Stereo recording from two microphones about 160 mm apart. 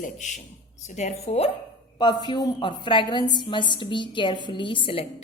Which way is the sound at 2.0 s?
25° left (ahead or behind).